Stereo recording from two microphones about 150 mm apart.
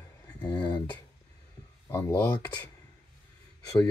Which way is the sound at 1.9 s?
15° left (ahead or behind).